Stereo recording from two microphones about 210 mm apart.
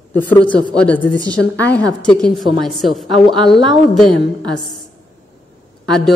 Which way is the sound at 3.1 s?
25° right (ahead or behind).